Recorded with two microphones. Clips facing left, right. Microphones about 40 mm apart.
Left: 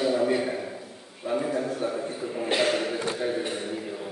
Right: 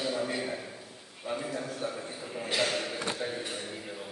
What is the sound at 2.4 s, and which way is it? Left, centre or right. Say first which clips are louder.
A man's voice: left 6 dB; left.